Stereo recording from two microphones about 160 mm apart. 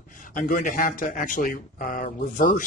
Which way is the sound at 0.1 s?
55° left (ahead or behind).